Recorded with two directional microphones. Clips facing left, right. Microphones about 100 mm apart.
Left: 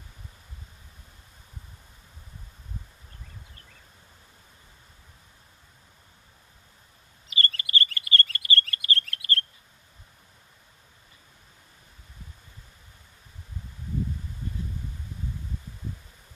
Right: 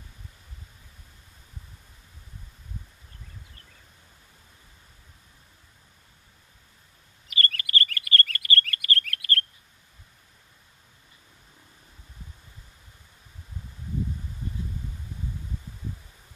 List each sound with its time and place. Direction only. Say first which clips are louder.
7.3 s chirp: right 1 dB; 25° left (ahead or behind)